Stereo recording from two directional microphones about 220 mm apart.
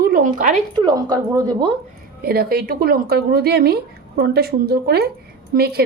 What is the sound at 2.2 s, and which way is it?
Speech, 45° right (ahead or behind).